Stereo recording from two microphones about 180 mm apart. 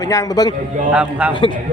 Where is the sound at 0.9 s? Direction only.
5° right (ahead or behind).